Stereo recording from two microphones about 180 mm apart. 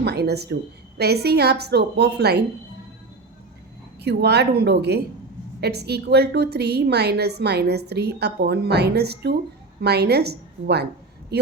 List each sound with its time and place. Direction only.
0.0 s a woman's voice: 65° right (ahead or behind)
4.0 s a woman's voice: 65° right (ahead or behind)